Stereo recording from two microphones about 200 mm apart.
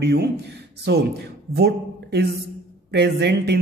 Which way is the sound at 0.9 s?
55° right (ahead or behind).